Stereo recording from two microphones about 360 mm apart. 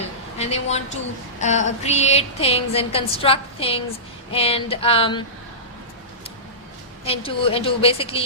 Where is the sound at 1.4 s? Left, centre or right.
Centre.